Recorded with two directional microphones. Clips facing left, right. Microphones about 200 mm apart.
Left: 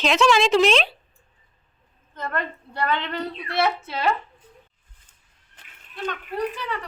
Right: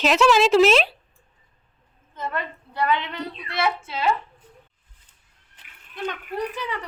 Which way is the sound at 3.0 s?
60° left (ahead or behind).